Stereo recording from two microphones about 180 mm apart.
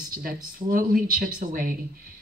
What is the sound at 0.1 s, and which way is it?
Speech, 50° right (ahead or behind).